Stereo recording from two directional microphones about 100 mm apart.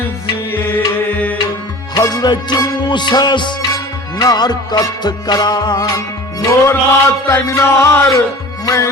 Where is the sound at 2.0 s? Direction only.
40° left (ahead or behind).